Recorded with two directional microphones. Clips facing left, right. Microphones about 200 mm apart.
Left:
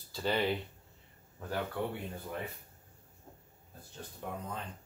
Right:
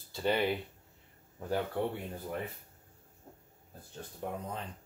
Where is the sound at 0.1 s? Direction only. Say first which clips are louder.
Right 1 dB; 15° right (ahead or behind).